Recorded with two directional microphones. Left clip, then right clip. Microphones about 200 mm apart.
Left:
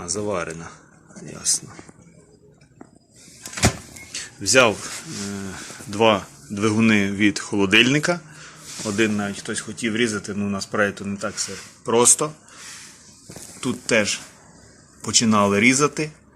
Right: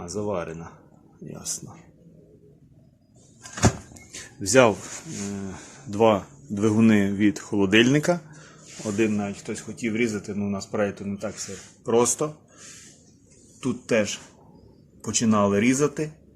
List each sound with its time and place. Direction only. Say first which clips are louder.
0.0 s speech: left 3 dB; 10° right (ahead or behind)
4.1 s a sound: left 2 dB; 25° right (ahead or behind)
5.2 s speech: even; centre (ahead or behind)
5.5 s speech: left 1 dB; 15° right (ahead or behind)
8.8 s speech: left 3 dB; centre (ahead or behind)
13.6 s speech: left 3 dB; centre (ahead or behind)